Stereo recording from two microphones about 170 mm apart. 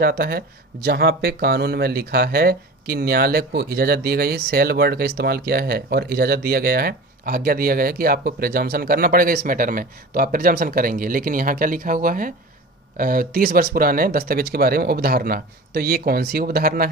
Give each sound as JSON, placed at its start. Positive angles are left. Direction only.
{"t": 0.0, "sound": "speech", "side_deg": -65}